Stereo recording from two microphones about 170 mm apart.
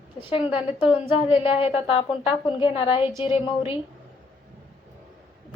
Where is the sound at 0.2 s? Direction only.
30° left (ahead or behind).